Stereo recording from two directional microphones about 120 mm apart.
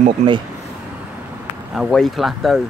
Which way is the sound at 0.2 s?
80° right.